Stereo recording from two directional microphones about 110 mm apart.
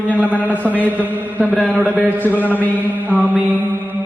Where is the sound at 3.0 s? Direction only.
15° right (ahead or behind).